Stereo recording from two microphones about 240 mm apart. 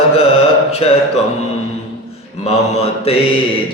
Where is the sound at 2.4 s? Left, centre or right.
Left.